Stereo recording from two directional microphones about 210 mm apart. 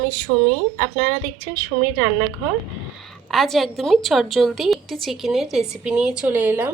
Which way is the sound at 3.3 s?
Centre (ahead or behind).